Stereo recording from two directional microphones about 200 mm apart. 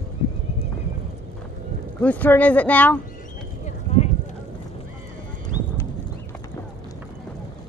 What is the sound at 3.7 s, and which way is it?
Clip-clop, 35° left (ahead or behind).